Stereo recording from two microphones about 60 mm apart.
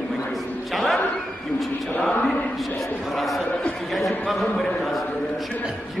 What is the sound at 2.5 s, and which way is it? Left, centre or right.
Speech, centre.